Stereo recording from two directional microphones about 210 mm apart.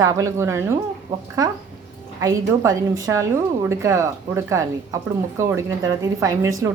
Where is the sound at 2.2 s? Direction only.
15° right (ahead or behind).